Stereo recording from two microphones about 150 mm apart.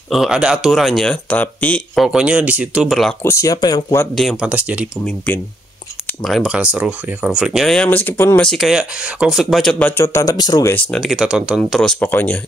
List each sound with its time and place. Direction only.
0.1 s speech: 5° right (ahead or behind)
2.0 s speech: 5° right (ahead or behind)
3.2 s speech: 20° left (ahead or behind)
4.1 s speech: centre (ahead or behind)
4.5 s speech: 10° right (ahead or behind)
5.0 s speech: 10° left (ahead or behind)
6.2 s speech: centre (ahead or behind); by 8.5 s 15° left (ahead or behind)
8.5 s speech: centre (ahead or behind)
10.0 s speech: 20° left (ahead or behind)
10.7 s speech: 10° left (ahead or behind)
11.8 s speech: 10° left (ahead or behind)